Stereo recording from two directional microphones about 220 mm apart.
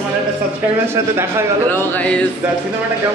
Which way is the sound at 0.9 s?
10° right (ahead or behind).